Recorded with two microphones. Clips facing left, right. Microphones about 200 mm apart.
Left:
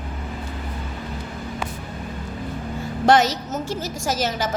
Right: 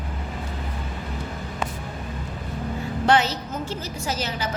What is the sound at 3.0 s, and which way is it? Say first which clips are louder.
A woman's voice: left 4 dB; 45° left (ahead or behind).